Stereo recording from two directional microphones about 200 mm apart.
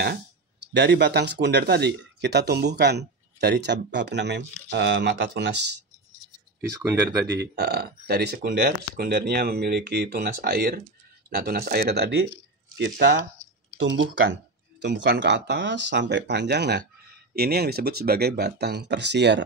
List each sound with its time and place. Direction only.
0.7 s speech: 60° right (ahead or behind)
6.8 s speech: 10° right (ahead or behind)
7.3 s speech: 55° right (ahead or behind)